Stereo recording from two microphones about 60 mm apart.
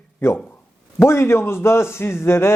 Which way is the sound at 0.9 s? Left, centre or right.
Left.